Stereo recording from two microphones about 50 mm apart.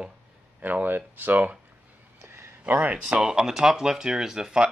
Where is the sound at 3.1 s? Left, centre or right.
Centre.